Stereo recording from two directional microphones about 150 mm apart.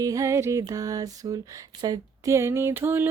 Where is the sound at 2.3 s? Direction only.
20° right (ahead or behind).